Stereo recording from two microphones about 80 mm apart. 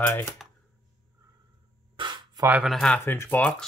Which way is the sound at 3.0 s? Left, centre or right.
Left.